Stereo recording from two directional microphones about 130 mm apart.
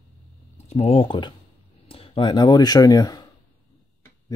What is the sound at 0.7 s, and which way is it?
Speech, 50° left (ahead or behind).